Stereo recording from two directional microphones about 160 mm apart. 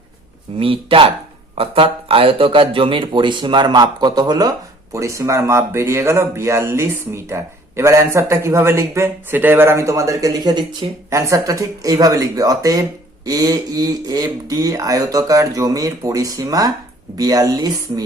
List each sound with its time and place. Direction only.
0.6 s speech: 35° right (ahead or behind)